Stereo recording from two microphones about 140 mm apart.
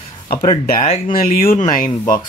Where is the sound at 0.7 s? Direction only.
50° left (ahead or behind).